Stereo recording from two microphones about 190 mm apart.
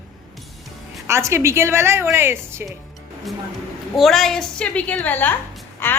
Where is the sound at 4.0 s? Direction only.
Centre (ahead or behind).